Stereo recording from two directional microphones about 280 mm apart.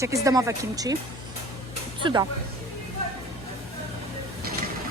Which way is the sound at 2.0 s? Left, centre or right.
Centre.